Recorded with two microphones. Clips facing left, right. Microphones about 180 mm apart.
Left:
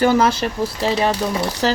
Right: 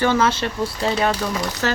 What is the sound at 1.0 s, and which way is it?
Speech, 25° left (ahead or behind).